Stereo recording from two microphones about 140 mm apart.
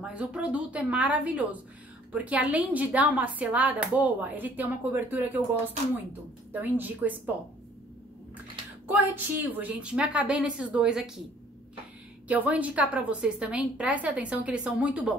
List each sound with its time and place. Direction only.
0.0 s a woman's voice: 10° right (ahead or behind)
6.5 s a woman's voice: 10° right (ahead or behind)
8.8 s a woman's voice: 10° right (ahead or behind)
12.3 s a woman's voice: 10° right (ahead or behind)